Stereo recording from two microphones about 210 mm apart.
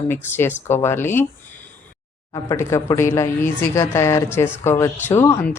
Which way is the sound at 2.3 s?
15° left (ahead or behind).